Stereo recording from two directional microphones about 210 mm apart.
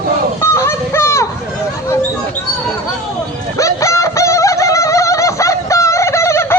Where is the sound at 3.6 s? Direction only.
15° left (ahead or behind).